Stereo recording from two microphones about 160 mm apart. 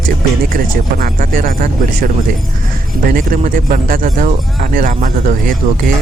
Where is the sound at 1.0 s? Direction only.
60° right (ahead or behind).